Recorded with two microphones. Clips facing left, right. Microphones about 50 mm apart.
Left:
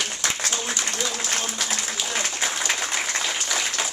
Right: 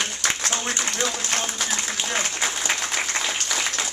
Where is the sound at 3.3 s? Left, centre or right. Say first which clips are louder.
Even; centre.